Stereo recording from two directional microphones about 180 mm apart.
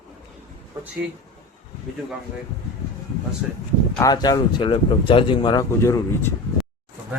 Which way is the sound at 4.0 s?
20° left (ahead or behind).